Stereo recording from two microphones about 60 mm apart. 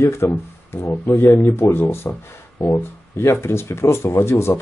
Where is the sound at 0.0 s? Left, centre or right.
Left.